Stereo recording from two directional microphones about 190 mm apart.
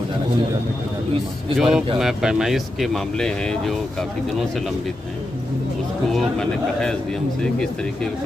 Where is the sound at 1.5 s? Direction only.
Centre (ahead or behind).